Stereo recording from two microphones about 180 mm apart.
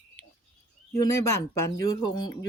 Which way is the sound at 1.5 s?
20° left (ahead or behind).